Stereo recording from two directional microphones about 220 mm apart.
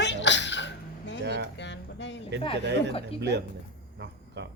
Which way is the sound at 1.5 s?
55° left (ahead or behind).